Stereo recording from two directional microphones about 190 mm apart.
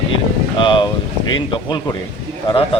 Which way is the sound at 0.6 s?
25° left (ahead or behind).